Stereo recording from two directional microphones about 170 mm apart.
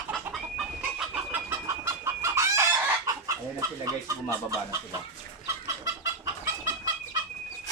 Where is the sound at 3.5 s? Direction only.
20° right (ahead or behind).